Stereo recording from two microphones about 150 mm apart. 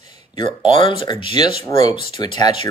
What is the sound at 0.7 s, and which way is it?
Speech, 35° left (ahead or behind).